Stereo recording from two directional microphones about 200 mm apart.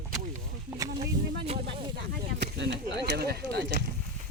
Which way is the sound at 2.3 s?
60° right (ahead or behind).